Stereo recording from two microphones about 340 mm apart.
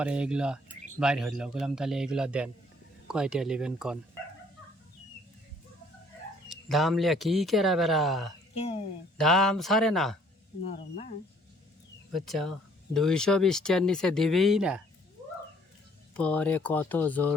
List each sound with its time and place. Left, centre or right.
0.0 s speech: centre
6.5 s speech: centre
8.5 s speech: centre
9.1 s speech: centre
12.1 s speech: centre
16.1 s speech: centre